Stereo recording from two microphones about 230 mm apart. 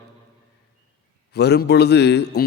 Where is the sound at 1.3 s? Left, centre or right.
Left.